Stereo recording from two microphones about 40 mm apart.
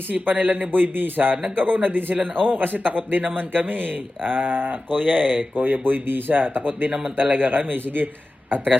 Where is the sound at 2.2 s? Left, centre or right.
Centre.